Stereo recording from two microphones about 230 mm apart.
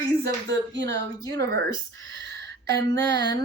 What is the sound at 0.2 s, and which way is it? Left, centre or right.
Speech, right.